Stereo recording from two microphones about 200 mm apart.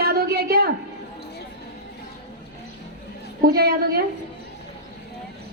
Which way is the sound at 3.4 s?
50° right (ahead or behind).